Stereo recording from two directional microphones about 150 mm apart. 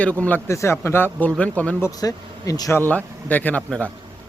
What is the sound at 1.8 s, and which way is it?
Speech, 25° left (ahead or behind).